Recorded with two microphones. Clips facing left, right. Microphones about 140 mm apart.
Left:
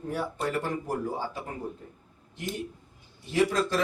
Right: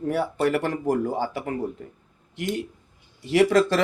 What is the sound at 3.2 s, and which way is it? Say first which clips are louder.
Speech: right 7 dB; 90° right.